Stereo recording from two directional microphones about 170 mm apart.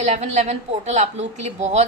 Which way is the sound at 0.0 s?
40° right (ahead or behind).